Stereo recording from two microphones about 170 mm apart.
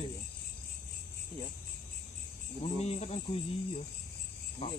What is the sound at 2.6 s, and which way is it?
Cricket, 40° left (ahead or behind).